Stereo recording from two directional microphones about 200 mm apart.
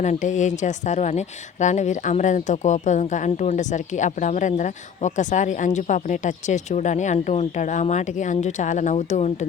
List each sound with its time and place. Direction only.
0.0 s a woman's voice: 35° left (ahead or behind)